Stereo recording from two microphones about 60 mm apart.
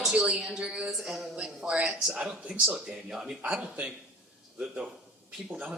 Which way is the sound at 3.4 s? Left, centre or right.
Right.